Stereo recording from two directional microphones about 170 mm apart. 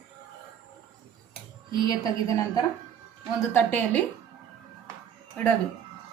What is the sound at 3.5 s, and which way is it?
Speech, 10° left (ahead or behind).